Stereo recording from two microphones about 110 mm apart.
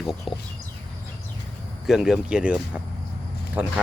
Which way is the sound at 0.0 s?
Centre (ahead or behind).